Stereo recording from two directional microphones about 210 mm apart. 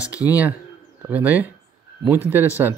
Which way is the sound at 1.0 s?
5° right (ahead or behind).